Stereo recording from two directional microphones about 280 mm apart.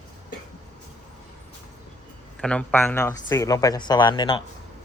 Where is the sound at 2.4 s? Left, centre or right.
Centre.